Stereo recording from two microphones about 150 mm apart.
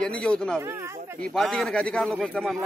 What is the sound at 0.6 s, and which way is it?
Speech, 15° right (ahead or behind).